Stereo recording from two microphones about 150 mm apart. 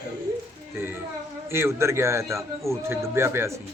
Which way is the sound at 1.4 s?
15° right (ahead or behind).